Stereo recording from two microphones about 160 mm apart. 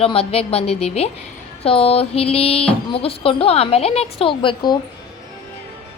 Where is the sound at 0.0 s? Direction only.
35° left (ahead or behind).